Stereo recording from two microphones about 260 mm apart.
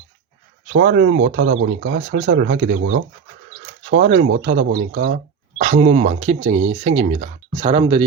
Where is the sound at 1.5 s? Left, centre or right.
Right.